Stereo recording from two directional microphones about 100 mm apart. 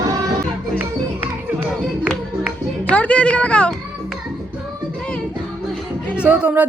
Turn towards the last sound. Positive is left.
turn(degrees=-15)  # may be behind; listen again after turning